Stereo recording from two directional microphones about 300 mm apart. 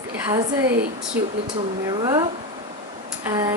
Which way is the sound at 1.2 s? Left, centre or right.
Centre.